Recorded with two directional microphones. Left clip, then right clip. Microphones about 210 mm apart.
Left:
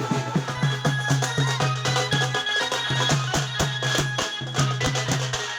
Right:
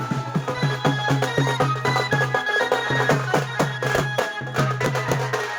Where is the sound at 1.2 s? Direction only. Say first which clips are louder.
Right 4 dB; 30° right (ahead or behind).